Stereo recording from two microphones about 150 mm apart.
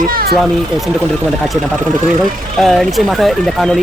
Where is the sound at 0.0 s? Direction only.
75° right (ahead or behind).